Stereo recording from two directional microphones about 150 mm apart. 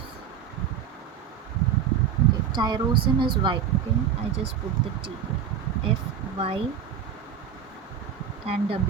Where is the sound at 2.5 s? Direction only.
30° right (ahead or behind).